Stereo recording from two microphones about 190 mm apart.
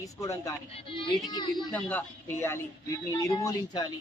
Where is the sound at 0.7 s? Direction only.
30° left (ahead or behind).